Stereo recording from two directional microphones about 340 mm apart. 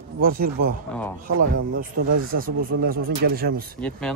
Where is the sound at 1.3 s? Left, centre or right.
Right.